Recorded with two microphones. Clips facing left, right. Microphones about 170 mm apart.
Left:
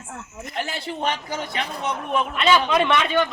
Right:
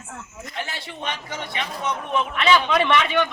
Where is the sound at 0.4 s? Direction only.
35° left (ahead or behind).